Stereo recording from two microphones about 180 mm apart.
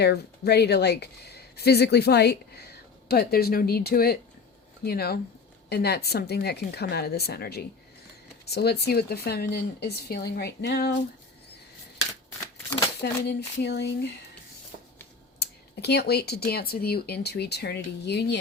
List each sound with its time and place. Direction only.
0.0 s speech: 65° left (ahead or behind)
13.0 s speech: 70° left (ahead or behind)
15.4 s speech: 65° left (ahead or behind)